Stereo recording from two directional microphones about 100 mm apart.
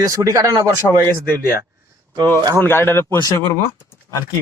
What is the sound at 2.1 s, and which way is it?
Speech, 45° right (ahead or behind).